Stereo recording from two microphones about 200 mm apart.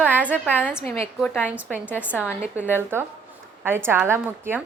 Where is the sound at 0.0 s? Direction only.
10° right (ahead or behind).